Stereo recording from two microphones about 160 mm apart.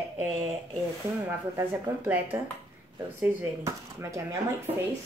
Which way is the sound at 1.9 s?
20° right (ahead or behind).